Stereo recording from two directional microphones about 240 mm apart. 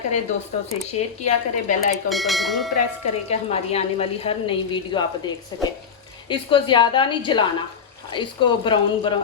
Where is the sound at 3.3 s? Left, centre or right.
Left.